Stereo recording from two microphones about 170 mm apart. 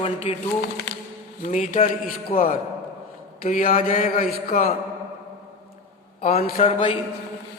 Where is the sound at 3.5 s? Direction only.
55° left (ahead or behind).